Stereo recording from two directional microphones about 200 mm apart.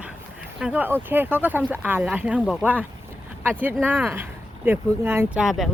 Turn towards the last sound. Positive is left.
turn(degrees=0)  # may be behind; listen again after turning